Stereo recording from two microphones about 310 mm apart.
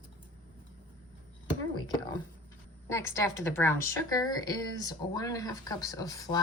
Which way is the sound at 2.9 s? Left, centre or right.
Centre.